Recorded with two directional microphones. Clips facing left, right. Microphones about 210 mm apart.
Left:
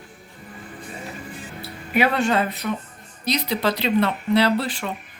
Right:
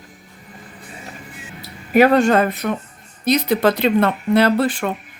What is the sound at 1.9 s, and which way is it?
Speech, 45° right (ahead or behind).